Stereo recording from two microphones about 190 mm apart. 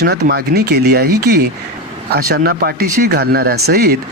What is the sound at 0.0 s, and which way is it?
Speech, 60° right (ahead or behind).